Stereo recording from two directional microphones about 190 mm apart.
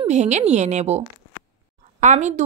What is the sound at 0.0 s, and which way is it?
A woman's voice, 35° right (ahead or behind).